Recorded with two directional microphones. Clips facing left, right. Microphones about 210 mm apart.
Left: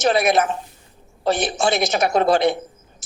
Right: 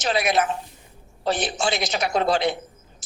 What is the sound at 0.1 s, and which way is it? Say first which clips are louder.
A woman's voice: even; 55° left (ahead or behind).